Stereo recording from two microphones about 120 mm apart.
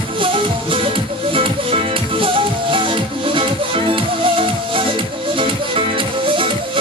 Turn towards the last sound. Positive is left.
turn(degrees=-45)  # may be behind; listen again after turning